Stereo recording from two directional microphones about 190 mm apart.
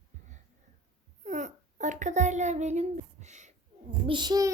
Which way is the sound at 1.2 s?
40° right (ahead or behind).